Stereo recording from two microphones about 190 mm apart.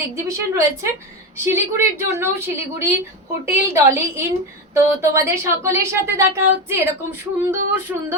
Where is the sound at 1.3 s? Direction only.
15° right (ahead or behind).